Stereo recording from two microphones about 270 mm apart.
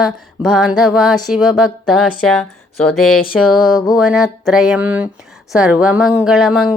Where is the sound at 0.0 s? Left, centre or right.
Centre.